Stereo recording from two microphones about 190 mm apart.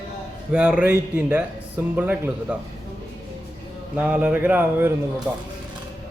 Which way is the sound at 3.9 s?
5° right (ahead or behind).